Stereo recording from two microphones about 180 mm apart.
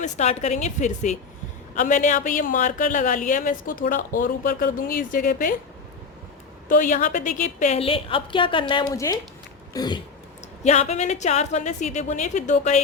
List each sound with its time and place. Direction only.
0.0 s a woman's voice: 40° left (ahead or behind)
6.7 s a woman's voice: 45° left (ahead or behind); by 9.1 s 20° left (ahead or behind)
9.7 s a sound: 25° left (ahead or behind)
10.6 s a woman's voice: 40° left (ahead or behind)